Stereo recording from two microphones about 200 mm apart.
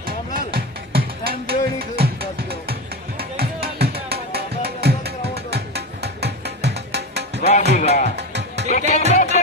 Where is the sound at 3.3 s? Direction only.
50° right (ahead or behind).